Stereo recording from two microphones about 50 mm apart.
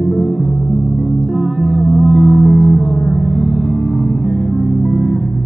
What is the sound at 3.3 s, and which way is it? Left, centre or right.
Gong, centre.